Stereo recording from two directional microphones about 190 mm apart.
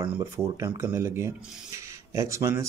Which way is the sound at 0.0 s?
20° right (ahead or behind).